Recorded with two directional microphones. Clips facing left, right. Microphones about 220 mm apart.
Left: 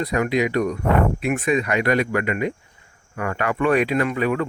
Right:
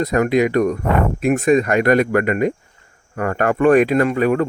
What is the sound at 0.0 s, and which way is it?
A man's voice, 45° right (ahead or behind).